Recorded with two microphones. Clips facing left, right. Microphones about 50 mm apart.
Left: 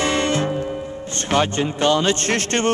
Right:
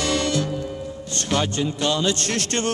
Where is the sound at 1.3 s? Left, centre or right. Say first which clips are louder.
Left 4 dB; left.